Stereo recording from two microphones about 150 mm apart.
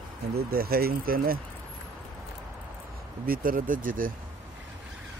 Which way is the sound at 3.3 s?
70° right (ahead or behind).